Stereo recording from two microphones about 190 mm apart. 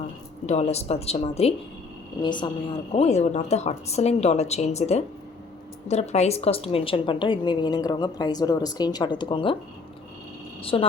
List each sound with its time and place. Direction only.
0.4 s a woman's voice: 35° left (ahead or behind)
10.6 s speech: 30° left (ahead or behind)